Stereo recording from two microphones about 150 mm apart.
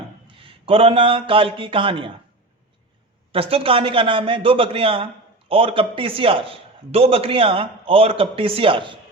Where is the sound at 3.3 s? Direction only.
40° right (ahead or behind).